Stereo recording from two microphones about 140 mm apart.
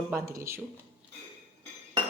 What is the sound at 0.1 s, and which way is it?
Speech, 20° right (ahead or behind).